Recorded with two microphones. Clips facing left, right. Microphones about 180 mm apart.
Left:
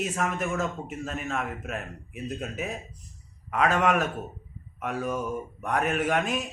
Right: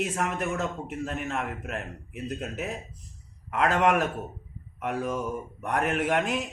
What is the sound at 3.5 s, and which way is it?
A man's voice, 20° right (ahead or behind).